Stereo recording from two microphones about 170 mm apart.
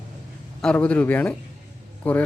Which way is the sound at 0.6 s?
5° left (ahead or behind).